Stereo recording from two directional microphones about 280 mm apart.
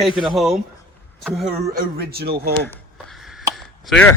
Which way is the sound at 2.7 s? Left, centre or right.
Centre.